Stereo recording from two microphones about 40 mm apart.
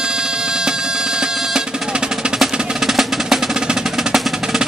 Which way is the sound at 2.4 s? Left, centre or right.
Centre.